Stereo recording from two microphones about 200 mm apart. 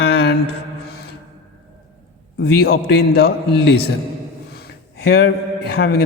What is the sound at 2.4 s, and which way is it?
A man's voice, 55° left (ahead or behind).